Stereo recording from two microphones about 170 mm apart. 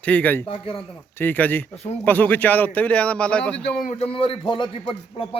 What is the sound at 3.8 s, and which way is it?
A man's voice, 45° left (ahead or behind).